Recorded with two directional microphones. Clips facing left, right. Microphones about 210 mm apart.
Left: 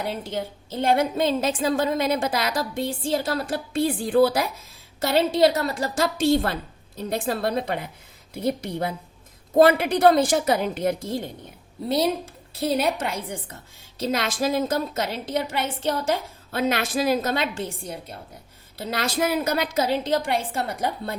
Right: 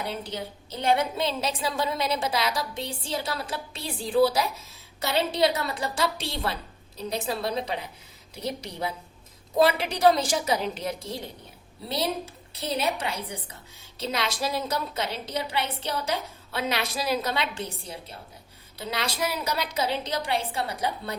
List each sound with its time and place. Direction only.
0.0 s a woman's voice: 50° left (ahead or behind)